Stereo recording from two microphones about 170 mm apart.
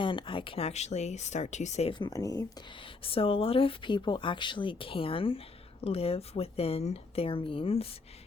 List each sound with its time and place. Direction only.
0.0 s speech: 30° left (ahead or behind)
1.9 s speech: 25° left (ahead or behind)